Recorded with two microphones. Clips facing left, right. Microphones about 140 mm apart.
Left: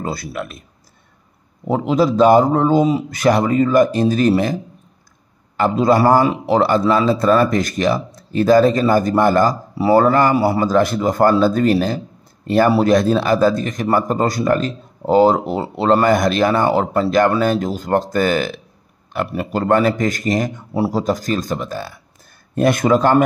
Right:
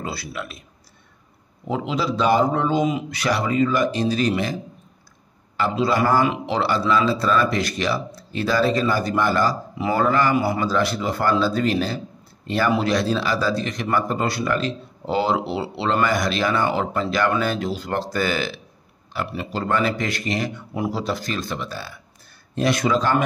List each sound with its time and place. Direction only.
0.0 s a man's voice: 45° left (ahead or behind)
1.7 s a man's voice: 45° left (ahead or behind)
5.6 s a man's voice: 45° left (ahead or behind)